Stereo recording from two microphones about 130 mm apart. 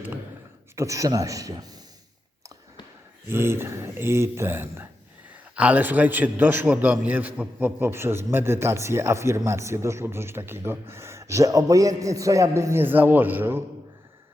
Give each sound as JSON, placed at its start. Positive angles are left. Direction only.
{"t": 0.8, "sound": "a man's voice", "side_deg": -25}
{"t": 3.2, "sound": "a man's voice", "side_deg": -20}